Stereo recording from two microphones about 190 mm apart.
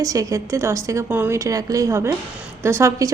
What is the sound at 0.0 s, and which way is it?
A woman's voice, 15° right (ahead or behind).